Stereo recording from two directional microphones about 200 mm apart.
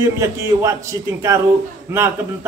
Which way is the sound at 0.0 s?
15° right (ahead or behind).